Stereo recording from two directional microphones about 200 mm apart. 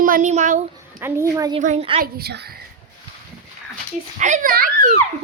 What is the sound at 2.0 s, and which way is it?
Speech, 55° right (ahead or behind).